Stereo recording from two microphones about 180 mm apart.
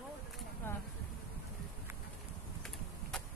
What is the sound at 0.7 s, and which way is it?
Speech, 10° left (ahead or behind).